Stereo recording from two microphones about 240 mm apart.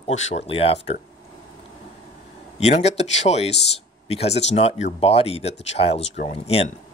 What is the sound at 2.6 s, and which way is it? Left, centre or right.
Speech, left.